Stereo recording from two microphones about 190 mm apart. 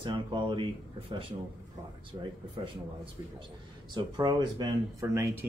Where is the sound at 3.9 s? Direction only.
25° right (ahead or behind).